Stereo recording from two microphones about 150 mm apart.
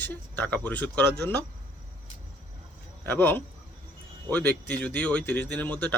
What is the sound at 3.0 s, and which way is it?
A man's voice, 15° left (ahead or behind).